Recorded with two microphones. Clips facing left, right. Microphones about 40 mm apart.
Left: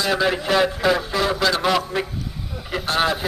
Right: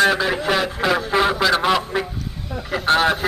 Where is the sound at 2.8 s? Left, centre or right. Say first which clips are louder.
Right 4 dB; right.